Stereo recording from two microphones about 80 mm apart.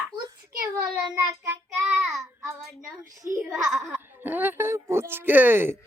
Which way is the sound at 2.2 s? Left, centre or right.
Right.